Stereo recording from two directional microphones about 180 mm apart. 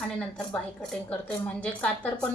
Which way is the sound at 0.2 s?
5° left (ahead or behind).